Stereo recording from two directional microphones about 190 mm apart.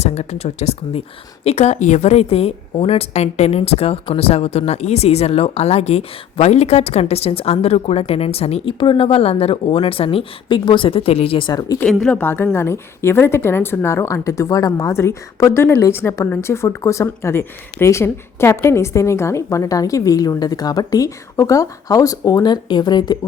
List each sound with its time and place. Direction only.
0.0 s a woman's voice: 35° left (ahead or behind)
11.8 s a woman's voice: 5° left (ahead or behind); by 23.1 s 20° left (ahead or behind)